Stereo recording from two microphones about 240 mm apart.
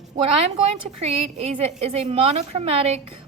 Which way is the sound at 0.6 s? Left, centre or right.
Right.